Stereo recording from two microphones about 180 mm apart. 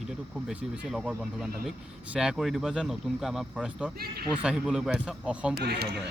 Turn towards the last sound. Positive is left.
turn(degrees=-65)  # may be behind; listen again after turning